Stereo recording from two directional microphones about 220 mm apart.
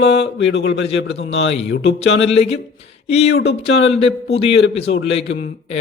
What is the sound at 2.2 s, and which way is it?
Speech, 30° left (ahead or behind).